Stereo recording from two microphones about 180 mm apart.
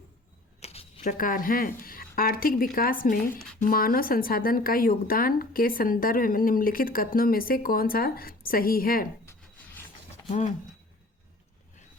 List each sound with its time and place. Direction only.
0.6 s a sound: 35° left (ahead or behind)
1.0 s speech: 50° left (ahead or behind)
9.2 s rub: 15° left (ahead or behind)
10.2 s speech: 40° left (ahead or behind)